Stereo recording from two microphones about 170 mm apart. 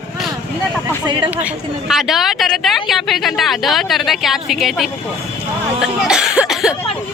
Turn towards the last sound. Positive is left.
turn(degrees=-5)  # may be behind; listen again after turning